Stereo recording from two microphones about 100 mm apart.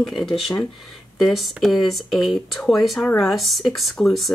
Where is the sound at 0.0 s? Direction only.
Centre (ahead or behind).